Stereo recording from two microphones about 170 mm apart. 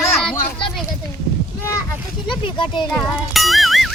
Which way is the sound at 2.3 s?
30° left (ahead or behind).